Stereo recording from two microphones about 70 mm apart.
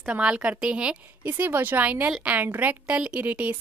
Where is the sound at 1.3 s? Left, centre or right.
Right.